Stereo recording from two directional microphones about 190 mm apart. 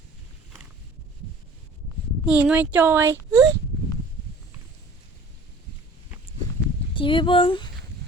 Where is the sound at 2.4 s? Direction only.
5° right (ahead or behind).